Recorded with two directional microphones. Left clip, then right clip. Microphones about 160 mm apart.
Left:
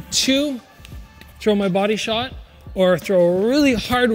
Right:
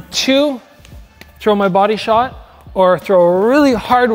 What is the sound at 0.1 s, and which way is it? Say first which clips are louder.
Speech: right 6 dB; 15° left (ahead or behind).